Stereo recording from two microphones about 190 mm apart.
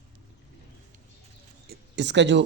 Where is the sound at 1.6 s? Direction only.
65° right (ahead or behind).